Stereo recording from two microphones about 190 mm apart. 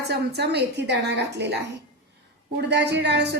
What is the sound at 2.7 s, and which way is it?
Speech, 65° right (ahead or behind).